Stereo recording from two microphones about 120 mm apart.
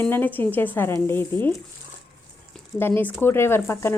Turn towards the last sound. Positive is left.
turn(degrees=25)  # may be behind; listen again after turning